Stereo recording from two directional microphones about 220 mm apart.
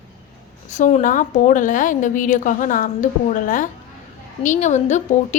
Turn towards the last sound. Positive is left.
turn(degrees=30)  # may be behind; listen again after turning